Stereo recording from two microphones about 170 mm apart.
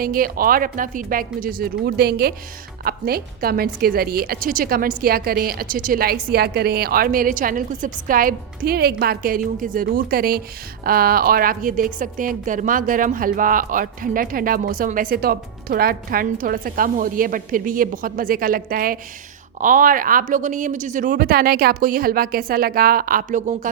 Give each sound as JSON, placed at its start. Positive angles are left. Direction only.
{"t": 0.0, "sound": "a woman's voice", "side_deg": -55}